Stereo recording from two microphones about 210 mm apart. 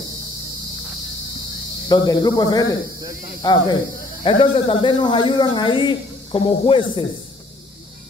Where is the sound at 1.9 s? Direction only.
20° left (ahead or behind).